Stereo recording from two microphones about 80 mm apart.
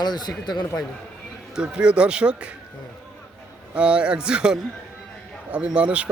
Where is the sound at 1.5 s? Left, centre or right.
Centre.